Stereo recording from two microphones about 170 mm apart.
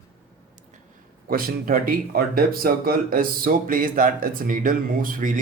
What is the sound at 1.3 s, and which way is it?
Speech, 55° right (ahead or behind).